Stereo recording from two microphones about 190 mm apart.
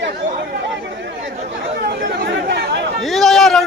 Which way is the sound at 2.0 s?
60° right (ahead or behind).